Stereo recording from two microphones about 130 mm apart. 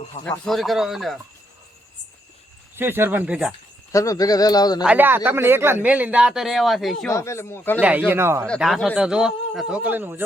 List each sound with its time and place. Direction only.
0.3 s a man's voice: centre (ahead or behind)
2.7 s speech: 15° right (ahead or behind)
3.9 s speech: 25° left (ahead or behind)
4.8 s speech: 10° right (ahead or behind)
7.1 s speech: 20° left (ahead or behind)
7.8 s speech: 10° right (ahead or behind)
8.4 s a man's voice: centre (ahead or behind); by 10.2 s 15° right (ahead or behind)